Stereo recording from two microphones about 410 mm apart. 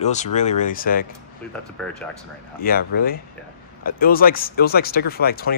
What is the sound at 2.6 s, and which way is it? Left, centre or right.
Speech, left.